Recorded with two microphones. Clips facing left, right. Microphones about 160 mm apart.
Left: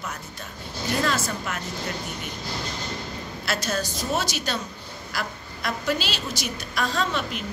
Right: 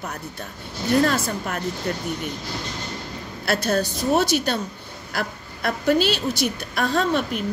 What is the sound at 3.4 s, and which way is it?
A woman's voice, 55° right (ahead or behind).